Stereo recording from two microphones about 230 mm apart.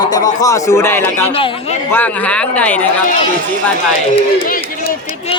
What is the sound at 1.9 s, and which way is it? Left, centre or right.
Speech, centre.